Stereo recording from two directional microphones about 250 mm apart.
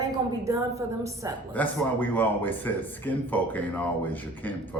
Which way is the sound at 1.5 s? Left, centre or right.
Centre.